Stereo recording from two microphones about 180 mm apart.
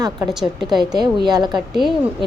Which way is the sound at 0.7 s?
25° right (ahead or behind).